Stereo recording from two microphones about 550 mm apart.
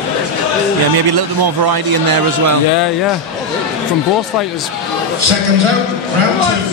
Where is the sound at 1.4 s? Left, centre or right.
Right.